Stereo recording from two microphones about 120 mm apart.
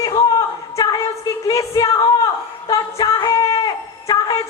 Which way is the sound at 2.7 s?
30° left (ahead or behind).